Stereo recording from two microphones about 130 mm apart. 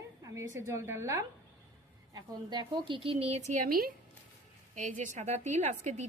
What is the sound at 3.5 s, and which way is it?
Speech, 90° right.